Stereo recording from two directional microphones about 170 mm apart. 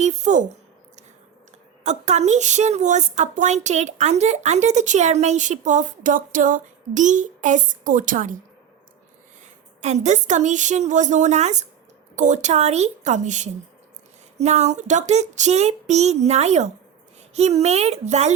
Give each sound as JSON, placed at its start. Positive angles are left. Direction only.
{"t": 0.0, "sound": "a woman's voice", "side_deg": -45}
{"t": 1.8, "sound": "a woman's voice", "side_deg": -40}
{"t": 9.4, "sound": "a woman's voice", "side_deg": -40}
{"t": 14.3, "sound": "a sound", "side_deg": -40}